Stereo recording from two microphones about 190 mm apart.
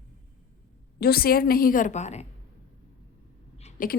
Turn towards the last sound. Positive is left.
turn(degrees=45)  # may be behind; listen again after turning